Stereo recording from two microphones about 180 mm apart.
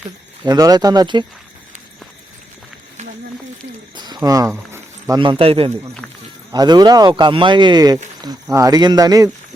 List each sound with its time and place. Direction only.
0.4 s a man's voice: 20° right (ahead or behind)
3.9 s a man's voice: 25° right (ahead or behind)